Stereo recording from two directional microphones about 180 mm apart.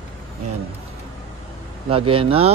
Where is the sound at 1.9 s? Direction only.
30° right (ahead or behind).